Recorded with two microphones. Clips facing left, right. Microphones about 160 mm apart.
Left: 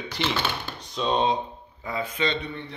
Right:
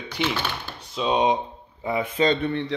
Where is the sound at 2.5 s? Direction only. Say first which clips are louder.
Right 10 dB; 90° right.